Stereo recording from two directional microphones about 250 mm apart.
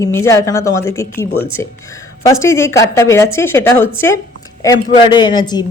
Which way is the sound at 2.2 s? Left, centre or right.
Centre.